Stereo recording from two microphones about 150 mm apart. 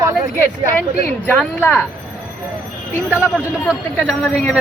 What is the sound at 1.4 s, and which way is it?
Speech, 15° left (ahead or behind).